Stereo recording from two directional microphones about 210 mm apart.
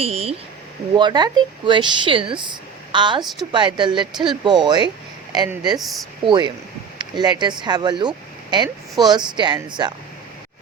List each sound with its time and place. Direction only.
0.0 s speech: 30° right (ahead or behind)
5.8 s speech: centre (ahead or behind)
6.2 s speech: 20° right (ahead or behind)